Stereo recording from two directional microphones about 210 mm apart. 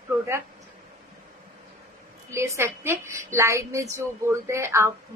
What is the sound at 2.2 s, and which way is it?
A child's voice, 15° right (ahead or behind).